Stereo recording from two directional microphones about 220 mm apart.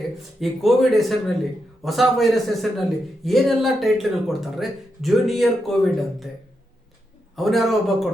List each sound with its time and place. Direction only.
0.3 s speech: centre (ahead or behind)
7.3 s speech: centre (ahead or behind)